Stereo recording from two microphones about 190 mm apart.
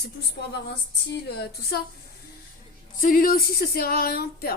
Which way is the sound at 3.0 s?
45° left (ahead or behind).